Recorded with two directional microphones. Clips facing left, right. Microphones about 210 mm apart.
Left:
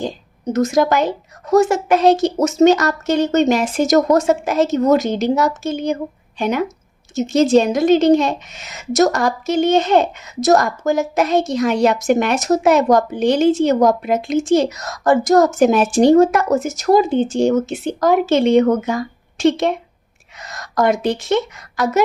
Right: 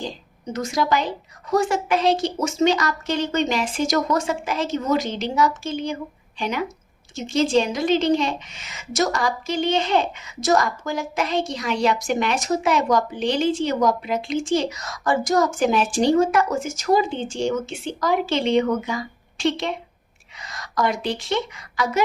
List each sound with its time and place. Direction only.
0.5 s a woman's voice: 45° left (ahead or behind)